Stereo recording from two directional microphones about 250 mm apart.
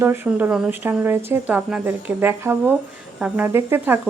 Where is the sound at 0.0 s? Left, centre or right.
Centre.